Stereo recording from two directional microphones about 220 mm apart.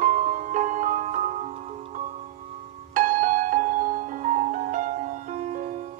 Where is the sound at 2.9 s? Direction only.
35° right (ahead or behind).